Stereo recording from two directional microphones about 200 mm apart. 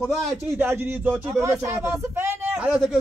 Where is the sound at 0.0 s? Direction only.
5° right (ahead or behind).